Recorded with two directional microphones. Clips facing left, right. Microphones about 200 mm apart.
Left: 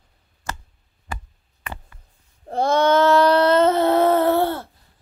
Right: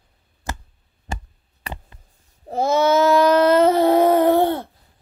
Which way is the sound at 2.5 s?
5° right (ahead or behind).